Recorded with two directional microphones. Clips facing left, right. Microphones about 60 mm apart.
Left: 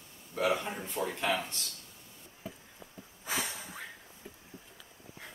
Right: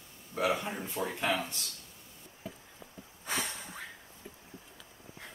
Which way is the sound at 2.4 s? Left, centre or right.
Centre.